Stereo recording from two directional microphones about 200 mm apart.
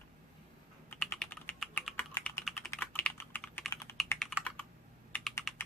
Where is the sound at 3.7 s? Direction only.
15° left (ahead or behind).